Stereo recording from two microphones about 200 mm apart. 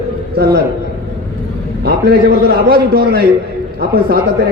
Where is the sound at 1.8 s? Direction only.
50° right (ahead or behind).